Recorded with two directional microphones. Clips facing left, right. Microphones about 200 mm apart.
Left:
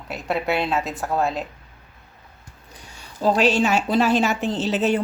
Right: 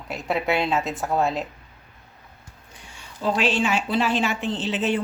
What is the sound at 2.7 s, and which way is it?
A woman's voice, 40° left (ahead or behind).